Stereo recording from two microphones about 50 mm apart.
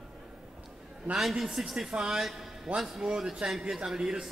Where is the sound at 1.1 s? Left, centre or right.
Centre.